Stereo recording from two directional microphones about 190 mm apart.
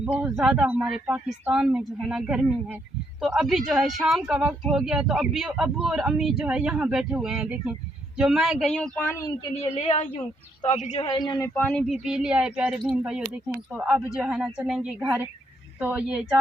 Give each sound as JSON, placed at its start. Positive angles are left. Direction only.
{"t": 0.0, "sound": "speech", "side_deg": -5}
{"t": 9.7, "sound": "a woman's voice", "side_deg": 30}
{"t": 11.0, "sound": "speech", "side_deg": 20}